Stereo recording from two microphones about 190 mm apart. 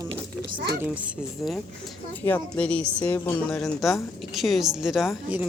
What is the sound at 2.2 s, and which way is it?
A woman's voice, 10° left (ahead or behind).